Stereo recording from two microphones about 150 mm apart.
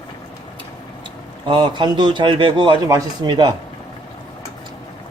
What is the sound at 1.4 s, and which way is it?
A man's voice, 30° right (ahead or behind).